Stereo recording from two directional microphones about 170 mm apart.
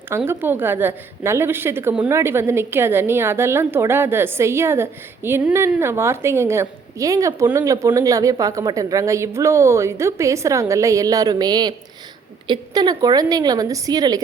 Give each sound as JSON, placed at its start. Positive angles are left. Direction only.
{"t": 0.3, "sound": "a woman's voice", "side_deg": -10}